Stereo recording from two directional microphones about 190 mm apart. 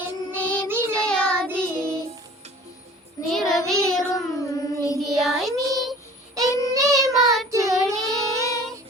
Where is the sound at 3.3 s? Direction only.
Centre (ahead or behind).